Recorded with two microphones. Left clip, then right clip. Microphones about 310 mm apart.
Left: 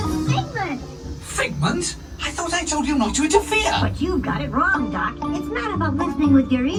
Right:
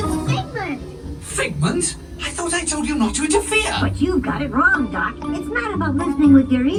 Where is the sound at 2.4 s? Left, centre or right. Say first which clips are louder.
Even; left.